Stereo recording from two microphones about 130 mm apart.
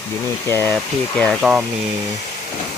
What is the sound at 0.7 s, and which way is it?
Speech, 5° left (ahead or behind).